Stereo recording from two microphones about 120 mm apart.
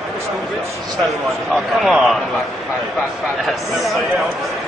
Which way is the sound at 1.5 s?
5° right (ahead or behind).